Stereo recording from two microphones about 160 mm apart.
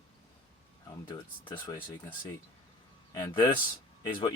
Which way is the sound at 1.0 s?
30° left (ahead or behind).